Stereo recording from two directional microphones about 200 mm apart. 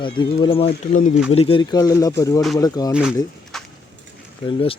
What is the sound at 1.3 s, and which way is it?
Speech, 30° left (ahead or behind).